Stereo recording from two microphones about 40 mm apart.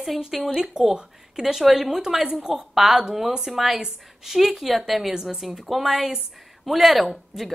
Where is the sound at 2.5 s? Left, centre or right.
Centre.